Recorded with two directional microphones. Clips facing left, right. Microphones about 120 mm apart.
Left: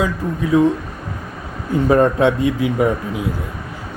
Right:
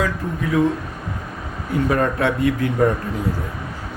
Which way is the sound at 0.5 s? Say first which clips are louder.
Left 4 dB; 25° left (ahead or behind).